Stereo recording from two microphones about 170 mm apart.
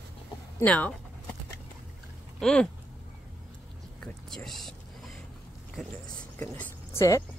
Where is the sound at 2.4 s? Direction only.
5° left (ahead or behind).